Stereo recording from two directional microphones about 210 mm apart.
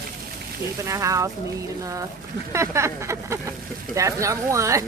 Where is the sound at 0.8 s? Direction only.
15° right (ahead or behind).